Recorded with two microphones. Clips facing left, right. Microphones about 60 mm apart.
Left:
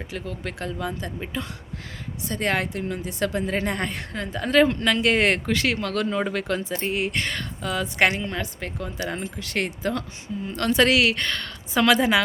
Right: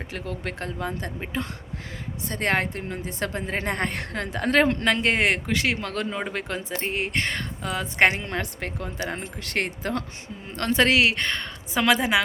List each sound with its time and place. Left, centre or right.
0.1 s a woman's voice: right
5.1 s a woman's voice: centre
6.1 s a woman's voice: centre
8.2 s a woman's voice: right
8.8 s a woman's voice: right
9.2 s a woman's voice: right; by 12.2 s centre